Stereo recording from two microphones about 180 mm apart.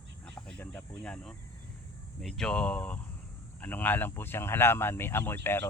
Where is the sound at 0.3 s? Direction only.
10° left (ahead or behind).